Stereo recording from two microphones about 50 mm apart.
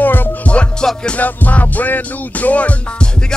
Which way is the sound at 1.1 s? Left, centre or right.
Left.